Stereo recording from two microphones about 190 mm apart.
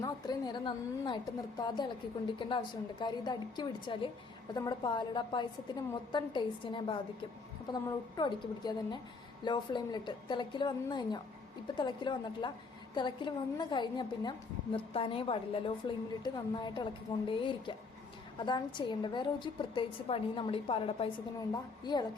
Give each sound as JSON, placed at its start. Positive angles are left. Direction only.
{"t": 0.0, "sound": "a woman's voice", "side_deg": 20}
{"t": 3.0, "sound": "a woman's voice", "side_deg": 20}